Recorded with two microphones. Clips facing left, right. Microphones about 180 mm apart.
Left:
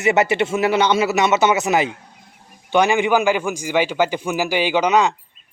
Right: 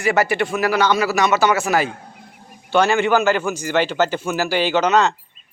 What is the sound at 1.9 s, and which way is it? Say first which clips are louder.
Speech: even; 50° right (ahead or behind).